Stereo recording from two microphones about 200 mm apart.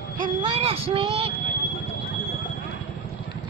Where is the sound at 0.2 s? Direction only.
25° right (ahead or behind).